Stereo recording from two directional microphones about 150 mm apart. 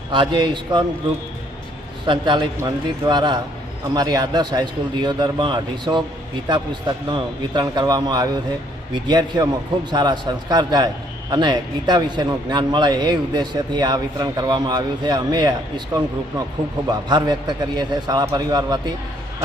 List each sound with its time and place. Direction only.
0.1 s a man's voice: 30° right (ahead or behind)
2.0 s a man's voice: 30° right (ahead or behind)